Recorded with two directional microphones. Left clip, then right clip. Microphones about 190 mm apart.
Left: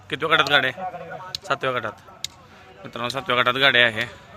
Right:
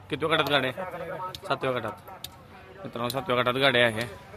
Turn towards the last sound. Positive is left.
turn(degrees=-5)  # may be behind; listen again after turning